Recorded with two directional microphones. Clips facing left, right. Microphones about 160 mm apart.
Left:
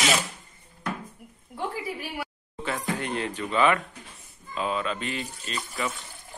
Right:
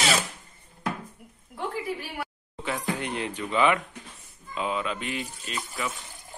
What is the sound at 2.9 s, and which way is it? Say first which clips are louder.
Speech: left 1 dB; 15° right (ahead or behind).